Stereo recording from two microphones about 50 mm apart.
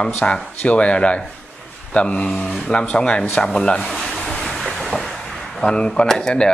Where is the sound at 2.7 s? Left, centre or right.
Left.